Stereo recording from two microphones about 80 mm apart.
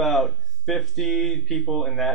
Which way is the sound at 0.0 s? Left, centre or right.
Centre.